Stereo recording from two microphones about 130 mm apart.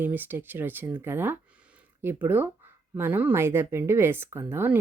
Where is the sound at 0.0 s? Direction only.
15° right (ahead or behind).